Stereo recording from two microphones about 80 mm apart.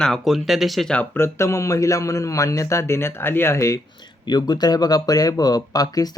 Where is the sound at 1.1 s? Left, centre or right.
Left.